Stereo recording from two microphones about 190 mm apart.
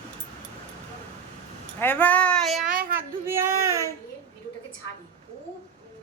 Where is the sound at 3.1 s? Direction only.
15° right (ahead or behind).